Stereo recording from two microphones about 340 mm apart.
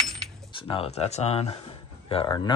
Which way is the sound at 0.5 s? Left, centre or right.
Centre.